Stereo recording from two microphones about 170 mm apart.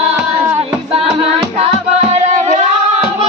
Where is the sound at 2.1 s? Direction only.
40° right (ahead or behind).